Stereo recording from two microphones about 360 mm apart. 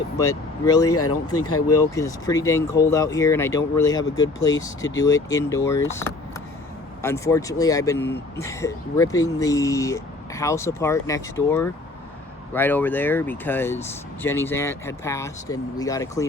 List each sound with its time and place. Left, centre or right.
0.2 s speech: centre
0.9 s speech: left
1.7 s speech: centre